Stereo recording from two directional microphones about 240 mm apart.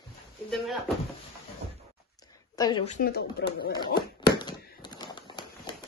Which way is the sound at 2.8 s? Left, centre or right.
Left.